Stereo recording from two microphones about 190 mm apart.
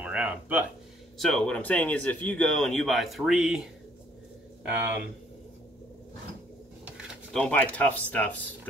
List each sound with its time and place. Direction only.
0.0 s speech: 5° right (ahead or behind)
7.3 s speech: 5° left (ahead or behind)